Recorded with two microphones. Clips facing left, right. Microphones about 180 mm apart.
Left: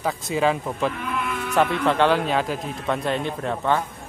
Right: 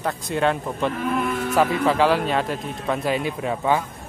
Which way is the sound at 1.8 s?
Centre (ahead or behind).